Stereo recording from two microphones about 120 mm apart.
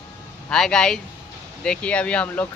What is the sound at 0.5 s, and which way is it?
Speech, 5° left (ahead or behind).